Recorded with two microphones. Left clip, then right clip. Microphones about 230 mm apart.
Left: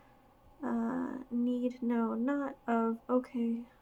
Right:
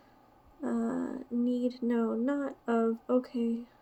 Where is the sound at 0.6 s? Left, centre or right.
Centre.